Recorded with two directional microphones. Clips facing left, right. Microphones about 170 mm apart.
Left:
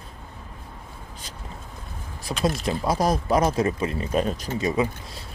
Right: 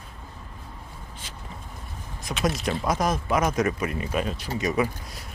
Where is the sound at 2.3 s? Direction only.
20° left (ahead or behind).